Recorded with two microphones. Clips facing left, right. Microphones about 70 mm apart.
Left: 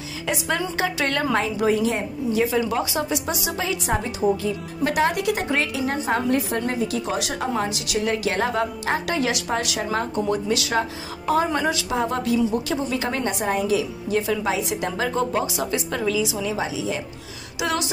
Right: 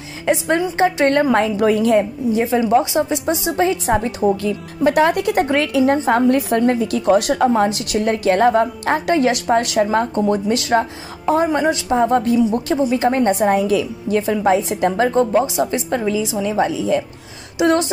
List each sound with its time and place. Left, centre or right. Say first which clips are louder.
0.6 s a woman's voice: right 8 dB; right
1.3 s a woman's voice: right 5 dB; right
2.3 s a woman's voice: right 7 dB; right
4.0 s a woman's voice: right 4 dB; right
11.4 s a woman's voice: right 6 dB; right
14.3 s a woman's voice: right 7 dB; right
15.4 s a woman's voice: right 6 dB; right
16.4 s a woman's voice: right 8 dB; right
17.6 s a woman's voice: right 9 dB; right